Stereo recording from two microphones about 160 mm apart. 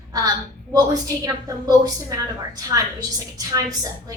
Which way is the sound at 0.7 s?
20° right (ahead or behind).